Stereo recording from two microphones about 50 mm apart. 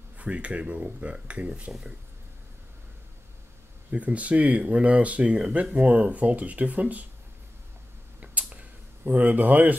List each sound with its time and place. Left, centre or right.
0.2 s speech: right
3.9 s speech: right
8.2 s a sound: right